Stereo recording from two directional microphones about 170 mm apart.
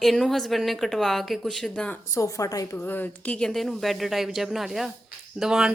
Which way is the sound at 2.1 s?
20° left (ahead or behind).